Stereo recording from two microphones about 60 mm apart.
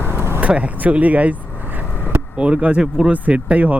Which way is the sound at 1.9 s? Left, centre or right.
Left.